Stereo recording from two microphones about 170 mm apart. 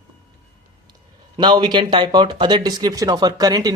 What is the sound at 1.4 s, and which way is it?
Speech, 25° right (ahead or behind).